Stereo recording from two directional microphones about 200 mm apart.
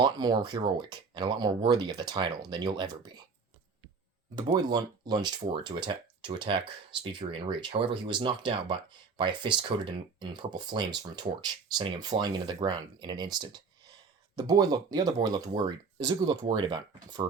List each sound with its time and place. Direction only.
0.0 s speech: 20° right (ahead or behind)
4.4 s speech: 20° right (ahead or behind)